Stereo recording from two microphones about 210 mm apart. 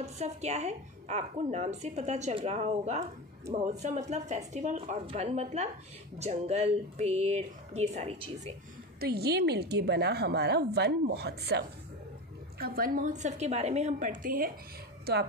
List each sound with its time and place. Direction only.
0.0 s a woman's voice: 30° right (ahead or behind)
9.0 s a woman's voice: 50° right (ahead or behind)